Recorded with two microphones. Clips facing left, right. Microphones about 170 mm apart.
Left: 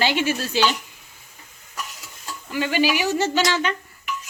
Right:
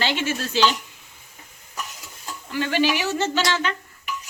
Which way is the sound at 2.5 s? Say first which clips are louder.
Left 1 dB; 10° left (ahead or behind).